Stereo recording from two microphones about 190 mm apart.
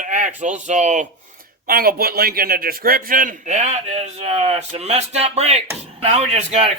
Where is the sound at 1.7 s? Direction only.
50° right (ahead or behind).